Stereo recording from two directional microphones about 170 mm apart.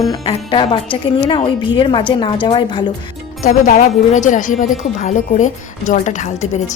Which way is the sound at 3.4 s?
50° left (ahead or behind).